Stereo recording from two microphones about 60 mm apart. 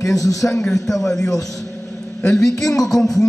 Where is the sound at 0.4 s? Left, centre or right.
Left.